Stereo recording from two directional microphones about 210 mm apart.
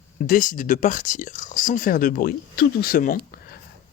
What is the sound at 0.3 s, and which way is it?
Speech, 40° left (ahead or behind).